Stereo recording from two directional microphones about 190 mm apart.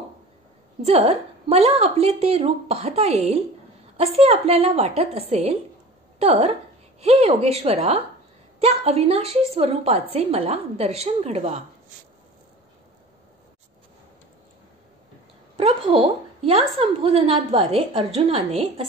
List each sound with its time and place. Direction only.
0.8 s a woman's voice: 35° right (ahead or behind)
15.5 s a woman's voice: 30° right (ahead or behind)